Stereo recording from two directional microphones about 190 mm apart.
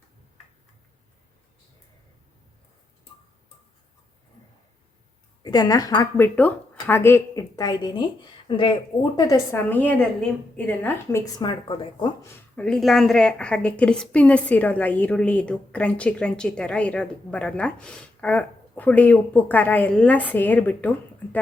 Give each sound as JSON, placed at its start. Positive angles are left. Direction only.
{"t": 5.4, "sound": "a woman's voice", "side_deg": 20}
{"t": 10.8, "sound": "speech", "side_deg": 20}